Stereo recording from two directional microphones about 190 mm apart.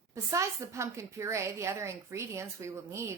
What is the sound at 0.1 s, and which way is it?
Speech, 15° right (ahead or behind).